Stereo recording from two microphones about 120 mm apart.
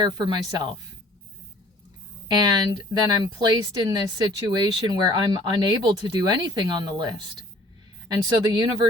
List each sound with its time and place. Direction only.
0.0 s speech: 35° right (ahead or behind)
2.2 s speech: 35° right (ahead or behind)